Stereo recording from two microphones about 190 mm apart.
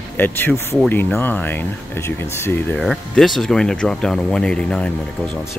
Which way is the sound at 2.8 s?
Centre (ahead or behind).